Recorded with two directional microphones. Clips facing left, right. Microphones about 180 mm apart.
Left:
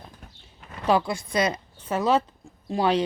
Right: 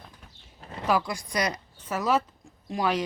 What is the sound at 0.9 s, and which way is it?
A woman's voice, 30° left (ahead or behind).